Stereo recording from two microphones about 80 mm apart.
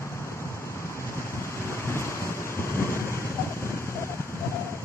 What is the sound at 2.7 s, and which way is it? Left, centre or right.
Waves, left.